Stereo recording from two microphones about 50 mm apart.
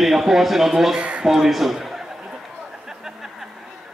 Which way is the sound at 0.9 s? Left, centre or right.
Right.